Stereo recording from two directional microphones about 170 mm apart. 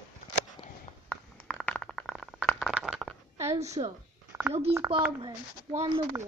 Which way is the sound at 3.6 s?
40° right (ahead or behind).